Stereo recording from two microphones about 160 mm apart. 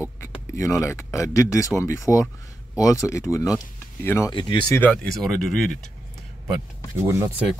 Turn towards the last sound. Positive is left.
turn(degrees=-20)  # may be behind; listen again after turning